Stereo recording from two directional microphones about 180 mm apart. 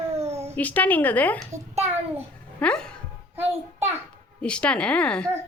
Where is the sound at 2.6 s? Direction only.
5° left (ahead or behind).